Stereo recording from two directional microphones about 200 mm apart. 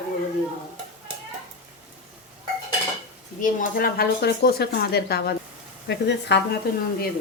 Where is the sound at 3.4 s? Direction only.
50° left (ahead or behind).